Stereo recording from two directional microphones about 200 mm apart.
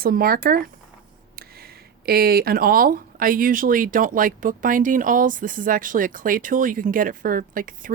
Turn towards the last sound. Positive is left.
turn(degrees=-45)  # may be behind; listen again after turning